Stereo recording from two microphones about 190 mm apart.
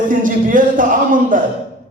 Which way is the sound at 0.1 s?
45° right (ahead or behind).